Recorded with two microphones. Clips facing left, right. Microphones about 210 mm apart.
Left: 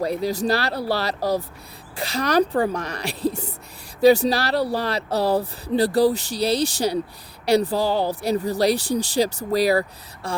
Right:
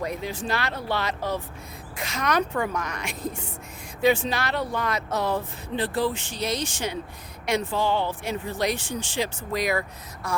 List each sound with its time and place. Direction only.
0.0 s speech: 35° left (ahead or behind)